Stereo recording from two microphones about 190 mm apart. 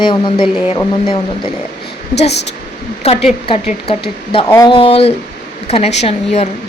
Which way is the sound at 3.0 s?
35° left (ahead or behind).